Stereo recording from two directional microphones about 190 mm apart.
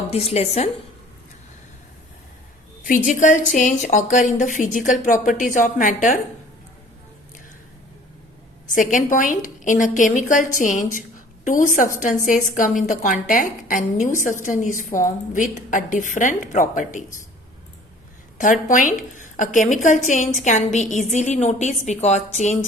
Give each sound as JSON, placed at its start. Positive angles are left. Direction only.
{"t": 0.1, "sound": "a woman's voice", "side_deg": 35}
{"t": 2.8, "sound": "a woman's voice", "side_deg": 45}
{"t": 8.6, "sound": "a woman's voice", "side_deg": 45}
{"t": 18.7, "sound": "a woman's voice", "side_deg": 45}